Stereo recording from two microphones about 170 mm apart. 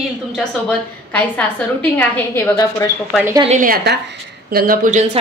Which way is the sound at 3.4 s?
50° right (ahead or behind).